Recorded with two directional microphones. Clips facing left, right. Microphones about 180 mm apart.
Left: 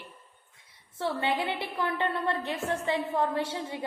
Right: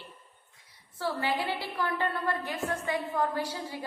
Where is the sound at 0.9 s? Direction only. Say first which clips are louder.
Left 1 dB; 25° left (ahead or behind).